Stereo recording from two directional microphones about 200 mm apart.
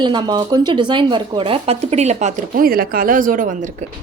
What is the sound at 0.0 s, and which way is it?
Speech, 20° right (ahead or behind).